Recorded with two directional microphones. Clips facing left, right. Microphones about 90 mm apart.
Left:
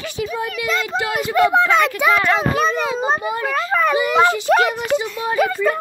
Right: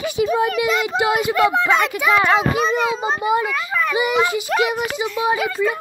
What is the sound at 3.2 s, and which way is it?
Speech, 15° right (ahead or behind).